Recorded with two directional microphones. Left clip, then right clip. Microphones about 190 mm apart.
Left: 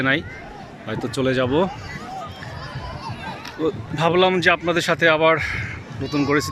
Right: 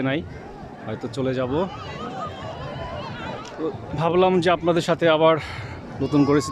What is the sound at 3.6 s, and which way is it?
Speech, 5° right (ahead or behind).